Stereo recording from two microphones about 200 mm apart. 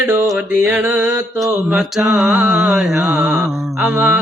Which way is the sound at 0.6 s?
10° right (ahead or behind).